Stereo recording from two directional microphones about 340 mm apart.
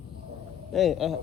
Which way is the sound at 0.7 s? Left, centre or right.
Centre.